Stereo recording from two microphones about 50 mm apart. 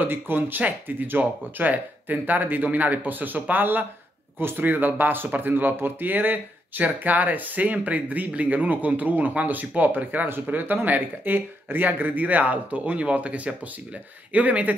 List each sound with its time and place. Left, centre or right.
0.0 s speech: right